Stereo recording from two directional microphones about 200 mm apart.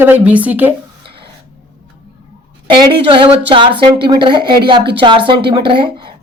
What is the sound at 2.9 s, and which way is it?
A woman's voice, 25° right (ahead or behind).